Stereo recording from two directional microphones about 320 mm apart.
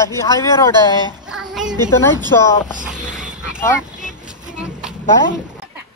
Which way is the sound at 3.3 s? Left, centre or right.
Centre.